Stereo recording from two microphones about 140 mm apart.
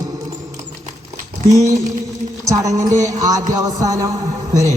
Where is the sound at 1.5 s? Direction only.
25° right (ahead or behind).